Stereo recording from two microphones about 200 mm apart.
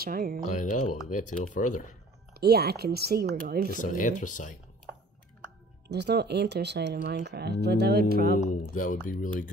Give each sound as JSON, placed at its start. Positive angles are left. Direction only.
{"t": 0.0, "sound": "speech", "side_deg": -50}
{"t": 0.5, "sound": "speech", "side_deg": 40}
{"t": 2.4, "sound": "speech", "side_deg": -50}
{"t": 3.8, "sound": "speech", "side_deg": 40}
{"t": 5.9, "sound": "speech", "side_deg": -55}
{"t": 8.4, "sound": "speech", "side_deg": 40}